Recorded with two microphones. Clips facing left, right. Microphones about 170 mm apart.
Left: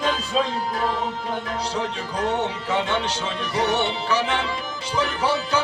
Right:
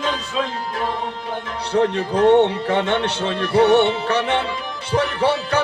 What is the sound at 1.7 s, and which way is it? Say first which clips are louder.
Speech: right 9 dB; 60° right (ahead or behind).